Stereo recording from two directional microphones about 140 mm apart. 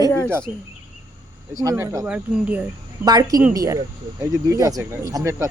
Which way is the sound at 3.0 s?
30° right (ahead or behind).